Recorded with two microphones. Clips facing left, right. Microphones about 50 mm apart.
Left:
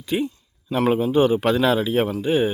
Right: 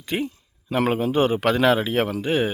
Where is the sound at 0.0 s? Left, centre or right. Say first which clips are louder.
Left 3 dB; right.